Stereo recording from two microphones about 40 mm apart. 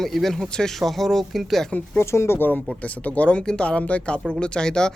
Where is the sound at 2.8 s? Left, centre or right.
Left.